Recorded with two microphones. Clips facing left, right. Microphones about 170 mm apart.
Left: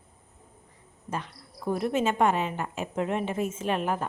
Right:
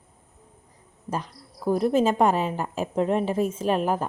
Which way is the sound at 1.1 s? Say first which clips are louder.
Right 3 dB; 40° right (ahead or behind).